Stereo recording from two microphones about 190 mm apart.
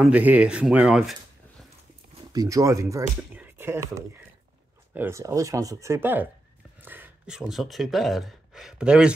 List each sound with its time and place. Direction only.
0.0 s speech: 10° right (ahead or behind)
2.3 s speech: 15° right (ahead or behind)
4.9 s speech: 15° right (ahead or behind)